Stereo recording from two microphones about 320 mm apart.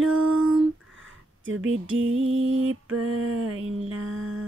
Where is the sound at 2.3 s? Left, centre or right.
Right.